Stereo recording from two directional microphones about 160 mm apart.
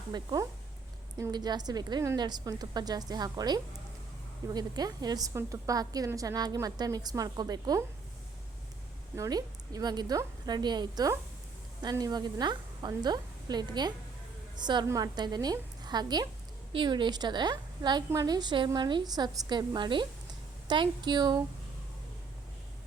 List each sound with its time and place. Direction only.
0.1 s a woman's voice: 25° right (ahead or behind)
9.1 s a woman's voice: 20° right (ahead or behind)